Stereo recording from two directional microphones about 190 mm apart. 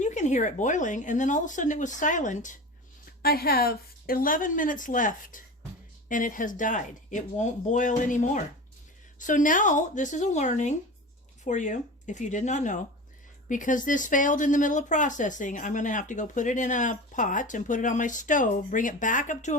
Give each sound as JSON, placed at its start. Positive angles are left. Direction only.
{"t": 0.0, "sound": "speech", "side_deg": 40}
{"t": 3.2, "sound": "speech", "side_deg": 55}